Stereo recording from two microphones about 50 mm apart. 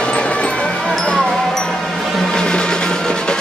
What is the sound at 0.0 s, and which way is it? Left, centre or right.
Music, left.